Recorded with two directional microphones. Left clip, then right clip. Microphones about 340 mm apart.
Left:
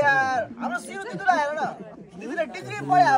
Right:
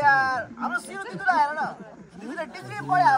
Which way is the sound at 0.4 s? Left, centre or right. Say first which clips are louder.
Left 2 dB; centre.